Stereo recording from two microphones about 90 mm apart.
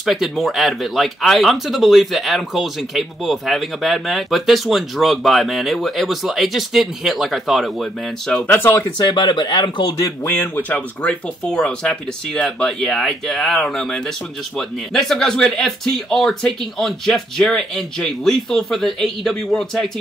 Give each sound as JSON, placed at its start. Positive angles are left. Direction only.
{"t": 0.0, "sound": "speech", "side_deg": 0}
{"t": 8.4, "sound": "speech", "side_deg": 20}
{"t": 8.9, "sound": "speech", "side_deg": 55}
{"t": 10.0, "sound": "speech", "side_deg": 25}